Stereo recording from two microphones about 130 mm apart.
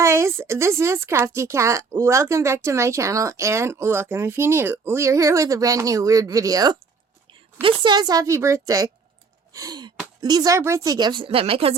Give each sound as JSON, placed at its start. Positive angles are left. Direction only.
{"t": 0.0, "sound": "a woman's voice", "side_deg": -20}